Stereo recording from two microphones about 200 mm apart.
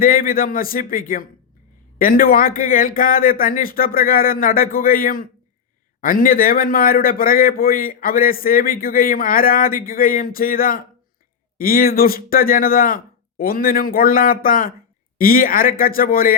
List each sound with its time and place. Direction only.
0.0 s a man's voice: 45° left (ahead or behind)